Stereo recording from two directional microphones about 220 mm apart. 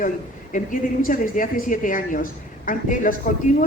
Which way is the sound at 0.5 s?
40° left (ahead or behind).